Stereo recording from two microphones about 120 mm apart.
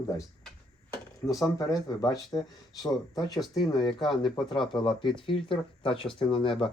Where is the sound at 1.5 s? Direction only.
25° left (ahead or behind).